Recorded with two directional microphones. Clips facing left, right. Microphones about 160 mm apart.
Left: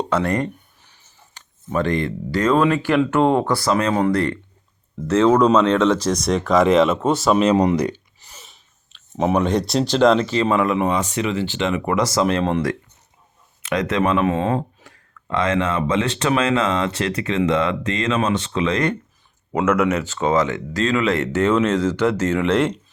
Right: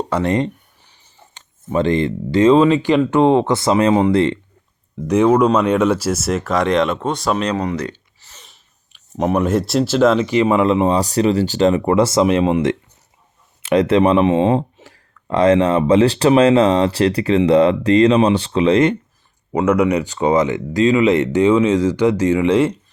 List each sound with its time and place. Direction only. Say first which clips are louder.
0.1 s speech: right 5 dB; 20° right (ahead or behind); by 7.5 s 5° left (ahead or behind)
7.5 s a sound: left 4 dB; 15° left (ahead or behind)
9.1 s speech: right 2 dB; centre (ahead or behind)
10.2 s speech: right 4 dB; 15° right (ahead or behind)
12.2 s speech: right 4 dB; 15° right (ahead or behind)
13.6 s speech: right 7 dB; 30° right (ahead or behind)
14.3 s speech: right 5 dB; 20° right (ahead or behind)
19.6 s speech: right 3 dB; 10° right (ahead or behind)